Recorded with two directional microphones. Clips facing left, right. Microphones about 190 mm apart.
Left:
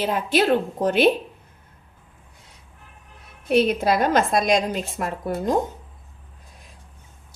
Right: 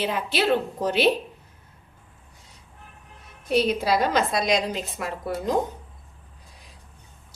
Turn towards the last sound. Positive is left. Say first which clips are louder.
# left 3 dB
turn(degrees=45)  # may be behind; listen again after turning